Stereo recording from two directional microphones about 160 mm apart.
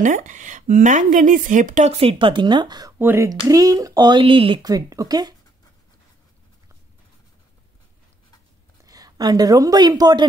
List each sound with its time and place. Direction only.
0.0 s speech: 50° right (ahead or behind); by 2.9 s 25° right (ahead or behind)
3.0 s speech: 10° right (ahead or behind)
8.8 s a woman's voice: 25° right (ahead or behind)